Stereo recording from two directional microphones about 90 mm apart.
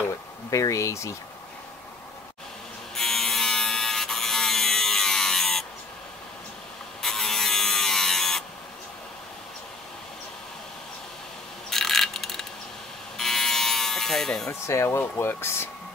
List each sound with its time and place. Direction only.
0.5 s speech: 40° left (ahead or behind)
3.0 s electric shaver: 5° left (ahead or behind)
7.0 s electric shaver: 5° left (ahead or behind)
11.7 s a sound: 5° left (ahead or behind)
13.2 s electric shaver: 5° left (ahead or behind)
14.7 s speech: 30° left (ahead or behind)